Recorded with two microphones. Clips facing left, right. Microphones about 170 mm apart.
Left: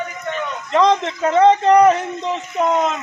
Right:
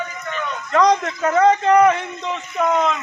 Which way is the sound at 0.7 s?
25° left (ahead or behind).